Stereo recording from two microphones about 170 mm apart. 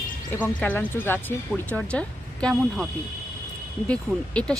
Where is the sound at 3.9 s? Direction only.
5° left (ahead or behind).